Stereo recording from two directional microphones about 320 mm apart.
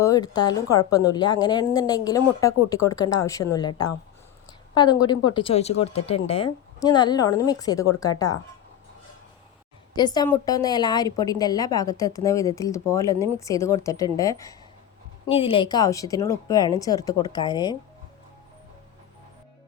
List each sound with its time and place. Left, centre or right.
0.0 s a woman's voice: centre
9.9 s a woman's voice: centre